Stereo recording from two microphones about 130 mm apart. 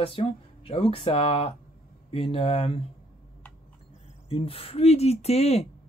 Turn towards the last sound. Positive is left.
turn(degrees=55)  # may be behind; listen again after turning